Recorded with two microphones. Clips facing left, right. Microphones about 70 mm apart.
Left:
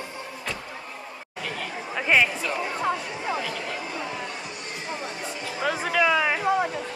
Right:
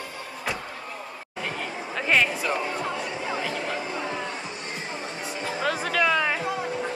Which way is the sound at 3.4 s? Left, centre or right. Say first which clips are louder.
Right 2 dB; right.